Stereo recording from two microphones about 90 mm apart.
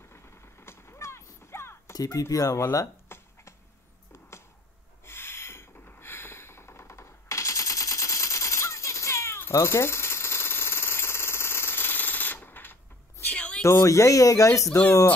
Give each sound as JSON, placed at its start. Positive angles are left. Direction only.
{"t": 0.1, "sound": "artillery fire", "side_deg": 30}
{"t": 2.0, "sound": "speech", "side_deg": 40}
{"t": 5.0, "sound": "a sound", "side_deg": 25}
{"t": 13.7, "sound": "speech", "side_deg": 35}